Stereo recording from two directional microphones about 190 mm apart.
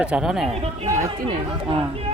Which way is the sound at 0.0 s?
5° right (ahead or behind).